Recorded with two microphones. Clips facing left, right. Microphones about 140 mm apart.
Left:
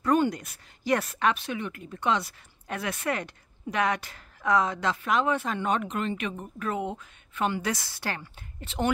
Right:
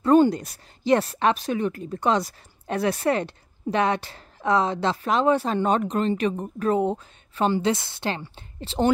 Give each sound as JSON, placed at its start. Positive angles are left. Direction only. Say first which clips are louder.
{"t": 0.0, "sound": "speech", "louder": "right 7 dB", "side_deg": -30}